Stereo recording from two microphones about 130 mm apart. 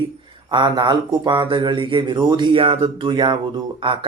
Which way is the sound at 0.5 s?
35° right (ahead or behind).